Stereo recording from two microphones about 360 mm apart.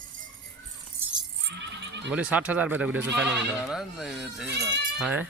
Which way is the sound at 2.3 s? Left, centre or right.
Centre.